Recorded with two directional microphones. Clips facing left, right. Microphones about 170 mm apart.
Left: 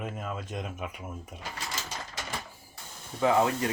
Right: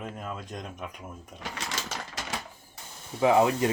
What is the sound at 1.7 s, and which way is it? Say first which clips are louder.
Typewriter: right 2 dB; 80° right.